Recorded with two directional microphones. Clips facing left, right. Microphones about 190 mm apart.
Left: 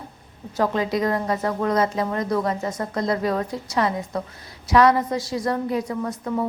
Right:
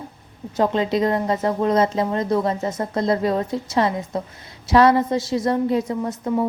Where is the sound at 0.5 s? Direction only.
25° right (ahead or behind).